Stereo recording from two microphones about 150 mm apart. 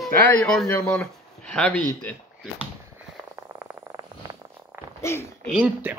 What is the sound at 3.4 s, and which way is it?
Frog, 15° right (ahead or behind).